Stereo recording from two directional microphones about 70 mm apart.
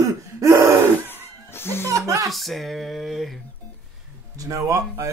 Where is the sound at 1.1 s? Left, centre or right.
Left.